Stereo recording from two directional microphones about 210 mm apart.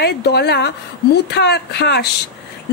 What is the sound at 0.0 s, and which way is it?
A woman's voice, 50° left (ahead or behind).